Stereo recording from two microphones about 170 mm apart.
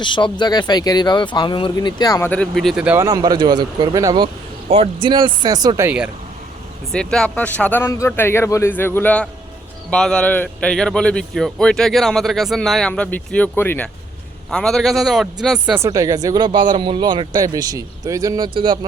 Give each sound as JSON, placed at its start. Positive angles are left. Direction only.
{"t": 0.0, "sound": "speech", "side_deg": 25}
{"t": 2.3, "sound": "speech", "side_deg": 5}
{"t": 3.1, "sound": "speech", "side_deg": -20}
{"t": 4.7, "sound": "speech", "side_deg": -35}
{"t": 6.9, "sound": "speech", "side_deg": 5}
{"t": 15.8, "sound": "speech", "side_deg": -20}